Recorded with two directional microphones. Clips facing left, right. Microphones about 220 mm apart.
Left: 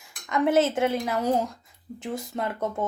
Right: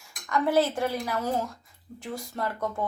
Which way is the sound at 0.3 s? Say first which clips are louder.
Left 2 dB; 20° left (ahead or behind).